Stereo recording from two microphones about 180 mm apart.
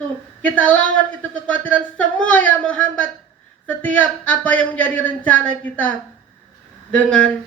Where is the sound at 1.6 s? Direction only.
5° left (ahead or behind).